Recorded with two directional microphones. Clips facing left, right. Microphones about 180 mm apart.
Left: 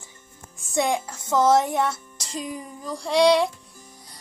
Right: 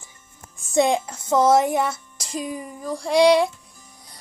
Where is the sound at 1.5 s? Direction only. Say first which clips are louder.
Right 2 dB; 10° right (ahead or behind).